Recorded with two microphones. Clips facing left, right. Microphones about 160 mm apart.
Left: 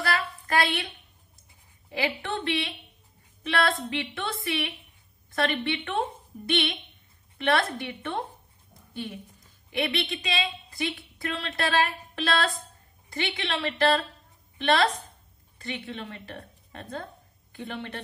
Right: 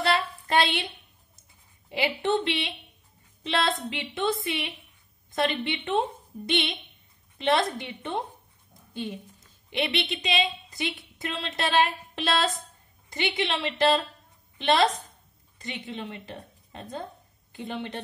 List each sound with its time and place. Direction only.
0.0 s a sound: 25° right (ahead or behind)
1.9 s a woman's voice: 20° right (ahead or behind)
9.7 s a woman's voice: 20° right (ahead or behind)